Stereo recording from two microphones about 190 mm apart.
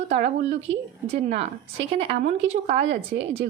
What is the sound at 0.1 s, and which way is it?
A woman's voice, 35° right (ahead or behind).